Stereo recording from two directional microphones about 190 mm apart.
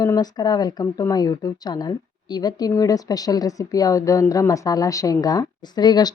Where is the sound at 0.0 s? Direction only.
20° left (ahead or behind).